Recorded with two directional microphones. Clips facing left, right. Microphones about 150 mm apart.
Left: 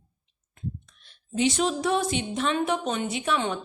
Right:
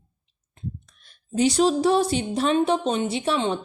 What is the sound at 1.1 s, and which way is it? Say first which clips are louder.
Speech: right 3 dB; 40° right (ahead or behind).